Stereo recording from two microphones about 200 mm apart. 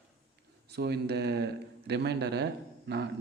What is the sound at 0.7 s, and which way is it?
A man's voice, 55° right (ahead or behind).